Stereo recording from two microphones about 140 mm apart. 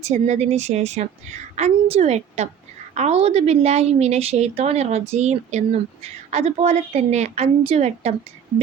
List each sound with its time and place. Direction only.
0.0 s speech: 55° right (ahead or behind)